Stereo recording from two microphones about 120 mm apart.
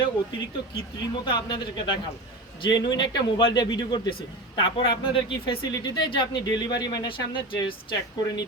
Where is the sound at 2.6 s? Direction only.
35° left (ahead or behind).